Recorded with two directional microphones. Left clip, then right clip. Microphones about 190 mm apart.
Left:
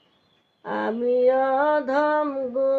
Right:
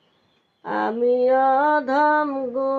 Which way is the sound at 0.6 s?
40° right (ahead or behind).